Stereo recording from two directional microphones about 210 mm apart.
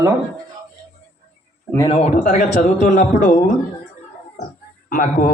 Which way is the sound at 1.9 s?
35° left (ahead or behind).